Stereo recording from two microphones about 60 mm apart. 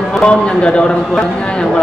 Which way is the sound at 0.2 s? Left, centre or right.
Centre.